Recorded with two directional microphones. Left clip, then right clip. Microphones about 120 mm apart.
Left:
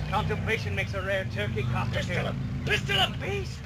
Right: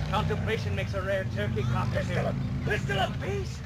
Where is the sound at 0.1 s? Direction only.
25° left (ahead or behind).